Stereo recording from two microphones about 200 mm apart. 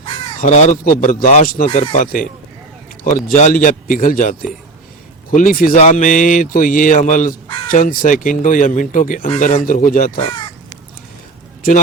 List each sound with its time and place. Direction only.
0.0 s speech: 35° left (ahead or behind)